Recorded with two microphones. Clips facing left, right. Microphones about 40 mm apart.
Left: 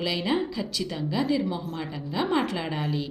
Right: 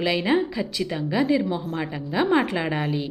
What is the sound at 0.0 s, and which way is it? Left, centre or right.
A woman's voice, right.